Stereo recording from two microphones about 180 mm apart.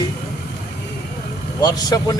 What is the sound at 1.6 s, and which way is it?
Speech, 20° left (ahead or behind).